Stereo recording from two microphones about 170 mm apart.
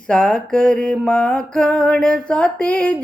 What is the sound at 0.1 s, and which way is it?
Mantra, 5° left (ahead or behind).